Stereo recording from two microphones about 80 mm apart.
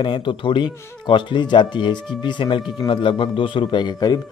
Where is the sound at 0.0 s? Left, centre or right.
Left.